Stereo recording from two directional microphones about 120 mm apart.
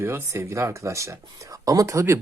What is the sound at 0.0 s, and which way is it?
Speech, 25° right (ahead or behind).